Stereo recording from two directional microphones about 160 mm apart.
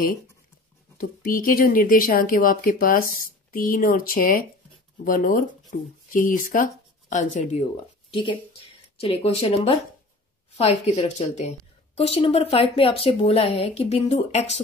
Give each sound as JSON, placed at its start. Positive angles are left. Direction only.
{"t": 0.9, "sound": "speech", "side_deg": 60}
{"t": 8.1, "sound": "a woman's voice", "side_deg": 30}